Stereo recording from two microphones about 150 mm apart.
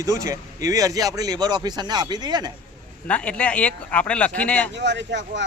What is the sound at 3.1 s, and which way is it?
Speech, 10° left (ahead or behind).